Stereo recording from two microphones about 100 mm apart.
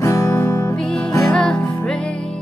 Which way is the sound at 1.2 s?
5° left (ahead or behind).